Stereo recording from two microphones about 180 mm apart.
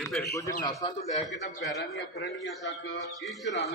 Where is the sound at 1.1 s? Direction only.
40° left (ahead or behind).